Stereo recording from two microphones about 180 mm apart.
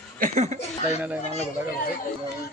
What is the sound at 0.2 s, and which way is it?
Speech, 45° right (ahead or behind).